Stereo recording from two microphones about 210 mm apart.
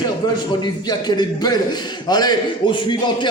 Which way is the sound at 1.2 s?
20° left (ahead or behind).